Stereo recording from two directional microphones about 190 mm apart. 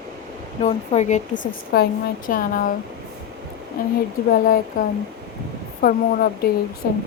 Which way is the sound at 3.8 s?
45° left (ahead or behind).